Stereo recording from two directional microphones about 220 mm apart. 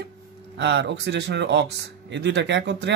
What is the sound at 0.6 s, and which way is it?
Speech, 55° right (ahead or behind).